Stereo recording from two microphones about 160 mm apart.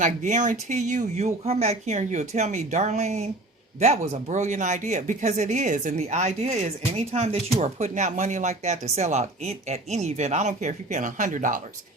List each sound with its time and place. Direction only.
0.0 s speech: 50° right (ahead or behind)